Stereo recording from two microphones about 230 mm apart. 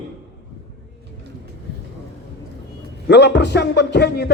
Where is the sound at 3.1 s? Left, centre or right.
Left.